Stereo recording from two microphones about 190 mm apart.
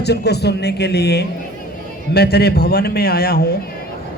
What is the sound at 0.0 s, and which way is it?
A man's voice, 60° left (ahead or behind).